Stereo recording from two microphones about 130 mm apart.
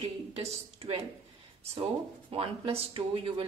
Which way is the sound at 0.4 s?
50° right (ahead or behind).